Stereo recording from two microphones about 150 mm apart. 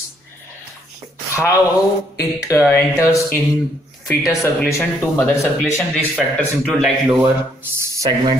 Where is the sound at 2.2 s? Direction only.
20° left (ahead or behind).